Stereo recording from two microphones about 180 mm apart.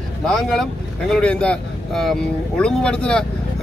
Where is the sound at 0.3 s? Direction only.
Centre (ahead or behind).